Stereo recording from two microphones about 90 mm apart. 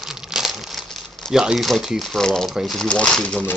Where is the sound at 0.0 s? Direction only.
5° right (ahead or behind).